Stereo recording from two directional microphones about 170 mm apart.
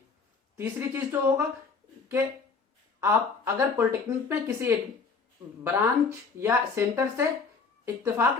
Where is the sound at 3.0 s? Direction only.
15° right (ahead or behind).